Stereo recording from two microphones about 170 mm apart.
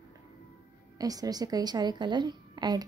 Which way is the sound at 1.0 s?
20° right (ahead or behind).